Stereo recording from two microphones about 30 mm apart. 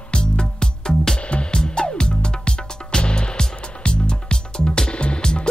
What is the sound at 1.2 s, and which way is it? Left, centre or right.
Music, left.